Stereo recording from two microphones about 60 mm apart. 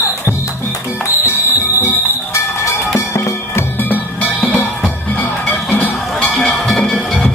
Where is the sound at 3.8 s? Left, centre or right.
Left.